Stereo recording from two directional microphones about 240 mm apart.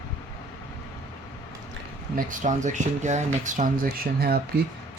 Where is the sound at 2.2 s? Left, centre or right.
Right.